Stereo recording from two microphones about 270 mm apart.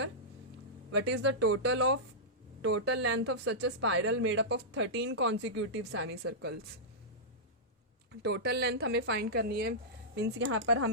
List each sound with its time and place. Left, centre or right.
0.9 s speech: right
8.2 s speech: right